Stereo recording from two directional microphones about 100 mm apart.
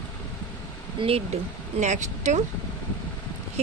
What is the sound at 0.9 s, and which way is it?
Speech, 70° right (ahead or behind).